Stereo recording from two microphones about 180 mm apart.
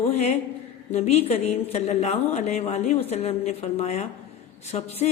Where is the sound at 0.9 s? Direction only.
35° left (ahead or behind).